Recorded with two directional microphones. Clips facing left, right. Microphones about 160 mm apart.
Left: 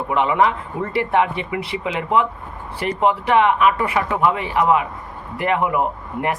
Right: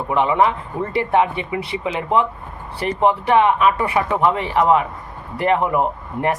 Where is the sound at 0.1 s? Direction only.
25° right (ahead or behind).